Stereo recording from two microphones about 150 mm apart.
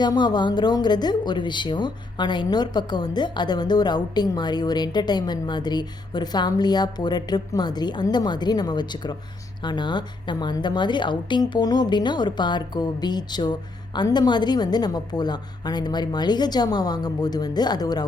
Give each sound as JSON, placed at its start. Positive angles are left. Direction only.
{"t": 0.0, "sound": "a woman's voice", "side_deg": 30}